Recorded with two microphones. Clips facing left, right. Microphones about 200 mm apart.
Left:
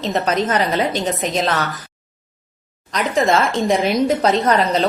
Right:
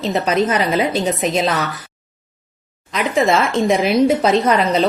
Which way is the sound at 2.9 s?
Centre (ahead or behind).